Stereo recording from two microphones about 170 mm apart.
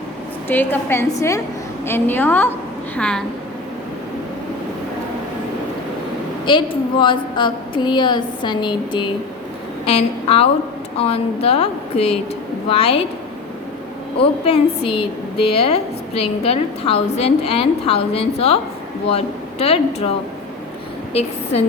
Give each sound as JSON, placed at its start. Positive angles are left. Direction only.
{"t": 0.4, "sound": "a woman's voice", "side_deg": 10}
{"t": 6.5, "sound": "a woman's voice", "side_deg": 30}
{"t": 14.2, "sound": "a woman's voice", "side_deg": 35}